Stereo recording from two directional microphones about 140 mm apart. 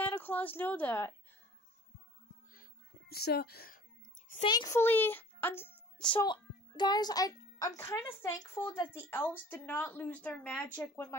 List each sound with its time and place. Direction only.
0.0 s a woman's voice: 15° left (ahead or behind)
3.1 s speech: 90° left
4.5 s a child's voice: 25° left (ahead or behind)
5.9 s a sound: 5° left (ahead or behind)
6.2 s a child's voice: 35° left (ahead or behind); by 11.1 s 15° left (ahead or behind)